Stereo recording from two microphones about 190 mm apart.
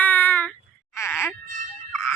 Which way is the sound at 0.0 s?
10° left (ahead or behind).